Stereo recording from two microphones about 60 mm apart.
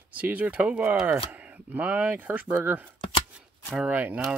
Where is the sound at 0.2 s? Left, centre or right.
Right.